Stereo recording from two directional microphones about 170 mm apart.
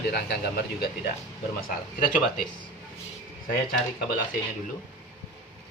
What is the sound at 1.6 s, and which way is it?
Speech, 55° left (ahead or behind).